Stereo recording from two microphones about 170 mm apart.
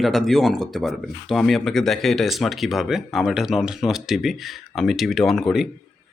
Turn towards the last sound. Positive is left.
turn(degrees=0)  # may be behind; listen again after turning